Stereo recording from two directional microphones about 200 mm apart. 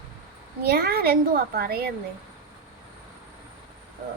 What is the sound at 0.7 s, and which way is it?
A woman's voice, 50° right (ahead or behind).